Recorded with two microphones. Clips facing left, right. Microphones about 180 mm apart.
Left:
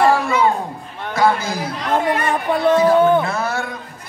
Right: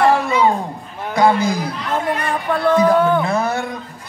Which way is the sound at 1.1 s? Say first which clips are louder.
Right 3 dB; 20° right (ahead or behind).